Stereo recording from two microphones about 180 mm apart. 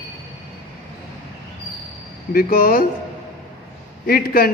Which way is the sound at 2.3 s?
55° left (ahead or behind).